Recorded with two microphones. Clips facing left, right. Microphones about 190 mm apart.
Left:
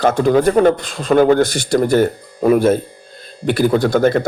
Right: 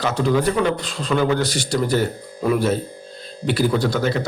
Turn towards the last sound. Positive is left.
turn(degrees=50)  # may be behind; listen again after turning